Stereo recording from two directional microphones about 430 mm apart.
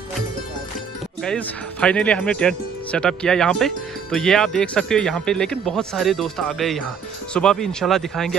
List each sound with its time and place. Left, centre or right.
1.2 s speech: centre